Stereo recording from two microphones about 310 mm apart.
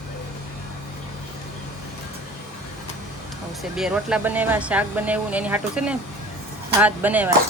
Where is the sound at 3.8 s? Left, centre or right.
Centre.